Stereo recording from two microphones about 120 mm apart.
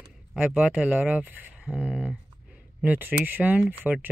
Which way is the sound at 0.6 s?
10° right (ahead or behind).